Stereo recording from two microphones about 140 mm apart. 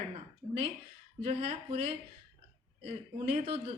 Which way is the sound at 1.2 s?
45° right (ahead or behind).